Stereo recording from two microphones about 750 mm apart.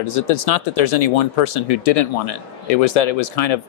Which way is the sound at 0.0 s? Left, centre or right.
Left.